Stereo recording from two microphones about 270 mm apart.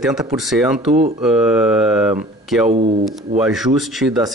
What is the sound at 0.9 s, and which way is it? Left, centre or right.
Speech, right.